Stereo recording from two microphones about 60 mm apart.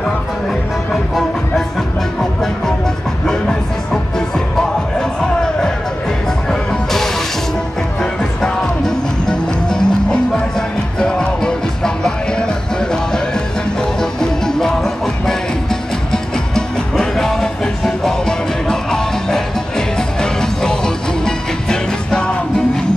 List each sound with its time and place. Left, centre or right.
3.3 s music: centre
5.2 s music: centre